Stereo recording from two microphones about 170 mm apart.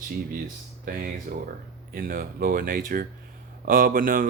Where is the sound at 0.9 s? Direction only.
55° right (ahead or behind).